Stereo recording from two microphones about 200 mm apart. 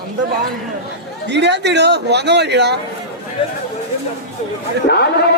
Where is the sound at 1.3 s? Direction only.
60° right (ahead or behind).